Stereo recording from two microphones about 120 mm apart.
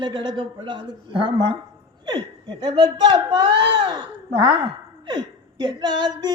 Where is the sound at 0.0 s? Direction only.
40° right (ahead or behind).